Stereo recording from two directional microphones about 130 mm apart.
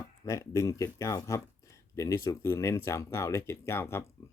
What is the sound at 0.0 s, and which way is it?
Speech, 25° left (ahead or behind).